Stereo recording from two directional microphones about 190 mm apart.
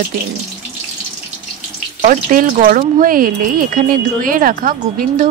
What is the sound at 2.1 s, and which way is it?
Speech, 45° right (ahead or behind).